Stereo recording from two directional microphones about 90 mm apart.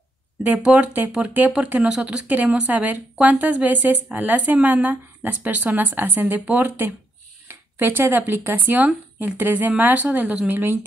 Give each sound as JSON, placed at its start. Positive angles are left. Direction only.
{"t": 0.4, "sound": "speech", "side_deg": -20}
{"t": 2.2, "sound": "speech", "side_deg": -20}